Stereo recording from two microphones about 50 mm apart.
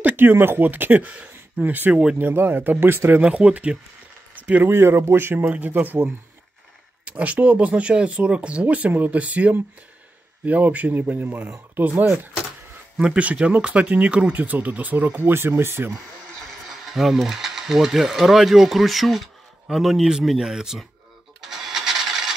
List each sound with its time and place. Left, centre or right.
0.1 s speech: right
1.0 s speech: right
1.6 s speech: right
3.2 s speech: right
4.4 s a sound: right
4.6 s speech: right
5.5 s speech: right
7.1 s speech: right
13.0 s speech: right
16.3 s speech: centre
21.4 s a sound: centre